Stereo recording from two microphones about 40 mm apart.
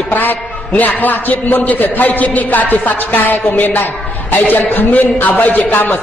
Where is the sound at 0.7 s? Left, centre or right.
Left.